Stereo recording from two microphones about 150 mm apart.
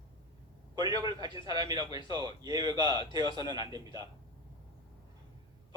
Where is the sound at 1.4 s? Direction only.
25° right (ahead or behind).